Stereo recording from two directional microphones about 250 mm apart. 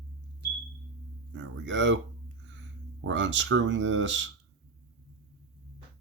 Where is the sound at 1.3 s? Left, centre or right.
Right.